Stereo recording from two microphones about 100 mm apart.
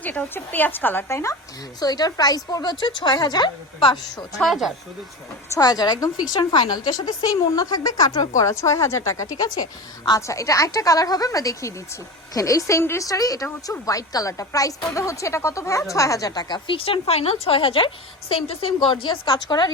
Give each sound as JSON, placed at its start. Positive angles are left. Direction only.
{"t": 0.0, "sound": "a woman's voice", "side_deg": 15}
{"t": 1.8, "sound": "a woman's voice", "side_deg": 40}
{"t": 4.4, "sound": "speech", "side_deg": 0}
{"t": 5.5, "sound": "a woman's voice", "side_deg": 40}
{"t": 16.6, "sound": "speech", "side_deg": 65}
{"t": 17.4, "sound": "a woman's voice", "side_deg": 65}